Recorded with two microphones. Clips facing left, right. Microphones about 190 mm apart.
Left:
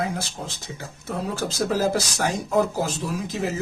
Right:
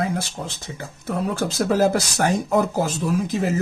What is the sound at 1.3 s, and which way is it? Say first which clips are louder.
Speech: right 3 dB; 55° right (ahead or behind).